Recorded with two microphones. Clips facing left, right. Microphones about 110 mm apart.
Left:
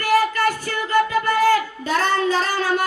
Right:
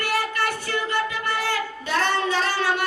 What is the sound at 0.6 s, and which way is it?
Child singing, 45° left (ahead or behind).